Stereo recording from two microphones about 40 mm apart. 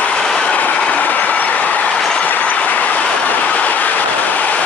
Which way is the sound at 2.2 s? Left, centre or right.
Left.